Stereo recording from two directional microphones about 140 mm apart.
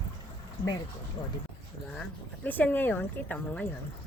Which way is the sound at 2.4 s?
15° left (ahead or behind).